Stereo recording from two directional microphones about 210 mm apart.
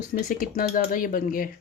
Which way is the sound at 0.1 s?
40° left (ahead or behind).